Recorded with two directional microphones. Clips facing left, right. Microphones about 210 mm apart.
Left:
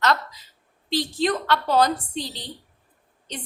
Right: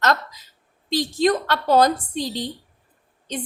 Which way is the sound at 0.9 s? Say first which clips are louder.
Right 4 dB; 45° right (ahead or behind).